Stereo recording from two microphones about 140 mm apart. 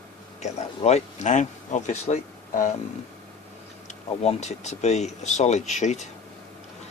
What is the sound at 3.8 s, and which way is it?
Speech, 50° left (ahead or behind).